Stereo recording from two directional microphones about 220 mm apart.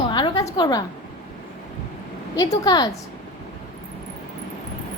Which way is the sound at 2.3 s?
15° left (ahead or behind).